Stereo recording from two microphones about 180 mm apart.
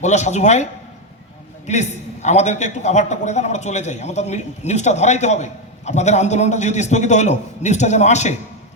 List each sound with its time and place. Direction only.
0.0 s a man's voice: 40° left (ahead or behind)